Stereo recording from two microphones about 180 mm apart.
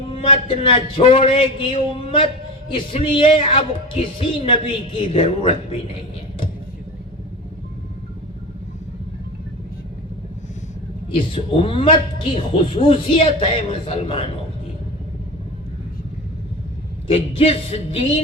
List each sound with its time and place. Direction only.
0.1 s a man's voice: 30° left (ahead or behind)
11.1 s speech: 30° left (ahead or behind)
17.1 s speech: 30° left (ahead or behind)